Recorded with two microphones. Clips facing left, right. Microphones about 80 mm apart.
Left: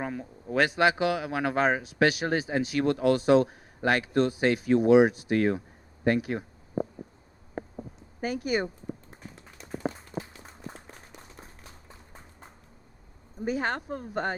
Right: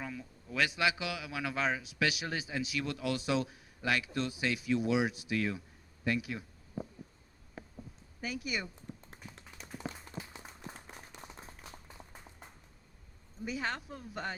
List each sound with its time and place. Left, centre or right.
0.0 s a man's voice: left
7.5 s a sound: left
9.0 s tap: centre
13.4 s a man's voice: left